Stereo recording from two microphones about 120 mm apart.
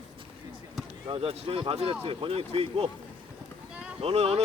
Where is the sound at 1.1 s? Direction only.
45° right (ahead or behind).